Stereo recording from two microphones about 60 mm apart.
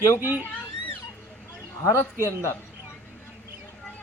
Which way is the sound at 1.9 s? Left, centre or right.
Left.